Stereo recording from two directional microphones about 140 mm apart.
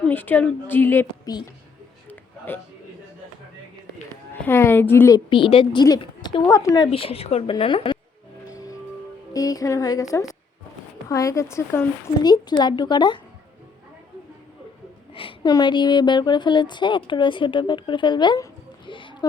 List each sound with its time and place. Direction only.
0.0 s a woman's voice: 15° left (ahead or behind)
1.2 s a woman's voice: 30° left (ahead or behind)
4.4 s a woman's voice: 15° left (ahead or behind)
5.3 s a woman's voice: 40° left (ahead or behind)
6.5 s speech: 25° left (ahead or behind)
6.9 s a woman's voice: 40° left (ahead or behind)
8.5 s music: 25° left (ahead or behind)
9.3 s speech: 25° left (ahead or behind)
12.2 s a woman's voice: 30° left (ahead or behind)
15.1 s a woman's voice: 40° left (ahead or behind)
18.9 s a sound: 35° left (ahead or behind)